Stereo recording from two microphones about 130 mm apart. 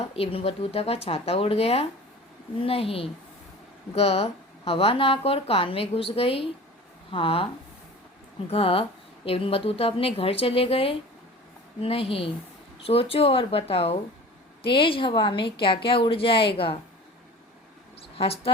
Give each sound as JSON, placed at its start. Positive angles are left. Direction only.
{"t": 0.0, "sound": "speech", "side_deg": 45}
{"t": 8.4, "sound": "a woman's voice", "side_deg": 45}
{"t": 18.2, "sound": "speech", "side_deg": 45}